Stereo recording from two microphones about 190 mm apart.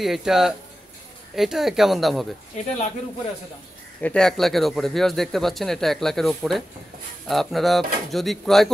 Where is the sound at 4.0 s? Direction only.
5° left (ahead or behind).